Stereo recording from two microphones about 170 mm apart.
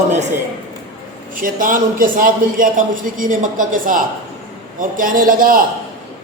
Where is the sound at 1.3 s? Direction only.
55° right (ahead or behind).